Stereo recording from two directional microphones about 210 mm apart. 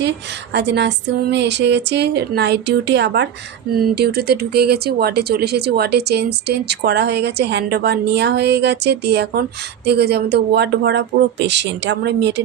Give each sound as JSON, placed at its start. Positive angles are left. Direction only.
{"t": 0.5, "sound": "speech", "side_deg": -55}